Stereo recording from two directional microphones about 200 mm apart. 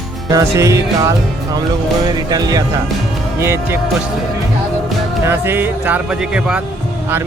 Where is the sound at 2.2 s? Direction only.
20° right (ahead or behind).